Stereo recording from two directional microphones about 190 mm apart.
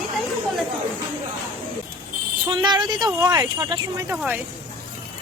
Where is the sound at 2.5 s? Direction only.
25° right (ahead or behind).